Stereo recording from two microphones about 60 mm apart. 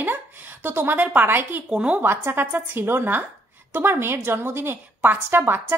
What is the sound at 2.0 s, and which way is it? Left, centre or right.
A woman's voice, right.